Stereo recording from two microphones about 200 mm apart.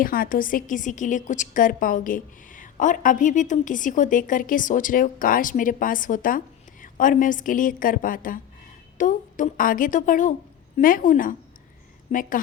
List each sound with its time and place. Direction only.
0.0 s a woman's voice: 45° left (ahead or behind)